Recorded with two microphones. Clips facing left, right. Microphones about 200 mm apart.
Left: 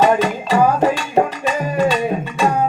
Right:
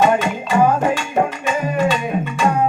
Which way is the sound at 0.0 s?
35° left (ahead or behind).